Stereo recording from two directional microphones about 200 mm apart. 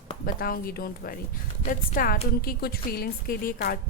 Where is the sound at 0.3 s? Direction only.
50° left (ahead or behind).